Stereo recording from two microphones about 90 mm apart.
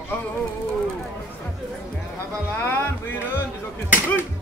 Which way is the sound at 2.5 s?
25° left (ahead or behind).